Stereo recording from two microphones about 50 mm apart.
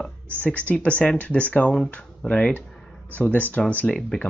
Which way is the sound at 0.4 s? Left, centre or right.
Left.